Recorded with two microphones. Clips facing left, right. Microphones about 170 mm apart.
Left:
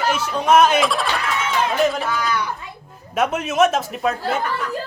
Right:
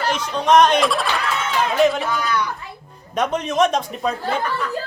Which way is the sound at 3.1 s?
5° left (ahead or behind).